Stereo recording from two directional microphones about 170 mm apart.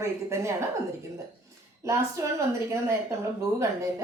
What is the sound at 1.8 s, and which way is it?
Speech, 20° right (ahead or behind).